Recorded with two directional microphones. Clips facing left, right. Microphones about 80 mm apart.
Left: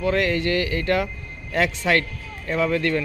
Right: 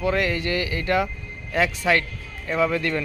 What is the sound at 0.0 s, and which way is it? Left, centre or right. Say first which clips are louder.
Speech: left 2 dB; centre.